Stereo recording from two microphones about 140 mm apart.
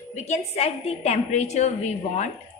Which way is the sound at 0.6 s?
50° left (ahead or behind).